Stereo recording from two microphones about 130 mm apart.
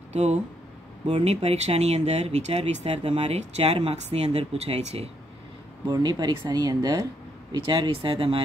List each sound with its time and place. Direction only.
0.1 s speech: 60° right (ahead or behind)
1.0 s speech: 45° right (ahead or behind)
5.9 s speech: 30° right (ahead or behind)